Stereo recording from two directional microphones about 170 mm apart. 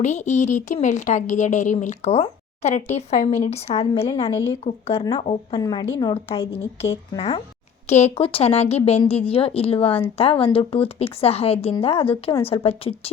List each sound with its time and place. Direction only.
0.0 s a woman's voice: 45° left (ahead or behind)
5.5 s a woman's voice: 25° left (ahead or behind)
7.9 s a woman's voice: 40° left (ahead or behind)